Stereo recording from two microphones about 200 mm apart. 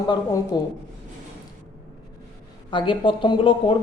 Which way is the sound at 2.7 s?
25° left (ahead or behind).